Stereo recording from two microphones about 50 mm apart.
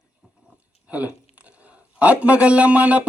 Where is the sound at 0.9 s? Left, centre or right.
Right.